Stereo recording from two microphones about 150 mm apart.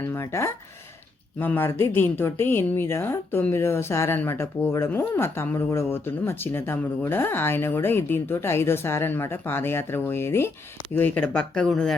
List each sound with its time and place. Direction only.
0.1 s speech: 15° left (ahead or behind)